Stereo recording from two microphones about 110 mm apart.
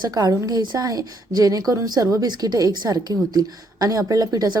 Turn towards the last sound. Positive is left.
turn(degrees=-35)  # may be behind; listen again after turning